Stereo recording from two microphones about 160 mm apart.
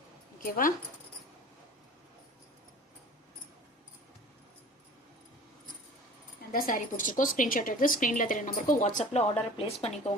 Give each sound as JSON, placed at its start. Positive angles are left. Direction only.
{"t": 0.3, "sound": "speech", "side_deg": 60}
{"t": 6.5, "sound": "a woman's voice", "side_deg": 60}
{"t": 9.6, "sound": "speech", "side_deg": 40}